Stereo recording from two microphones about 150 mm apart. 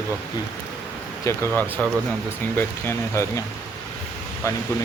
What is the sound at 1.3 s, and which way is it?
Speech, 15° left (ahead or behind).